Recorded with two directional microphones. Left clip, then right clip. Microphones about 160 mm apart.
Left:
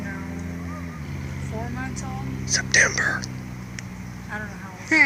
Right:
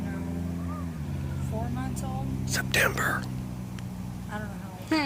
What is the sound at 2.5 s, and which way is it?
Speech, 20° right (ahead or behind).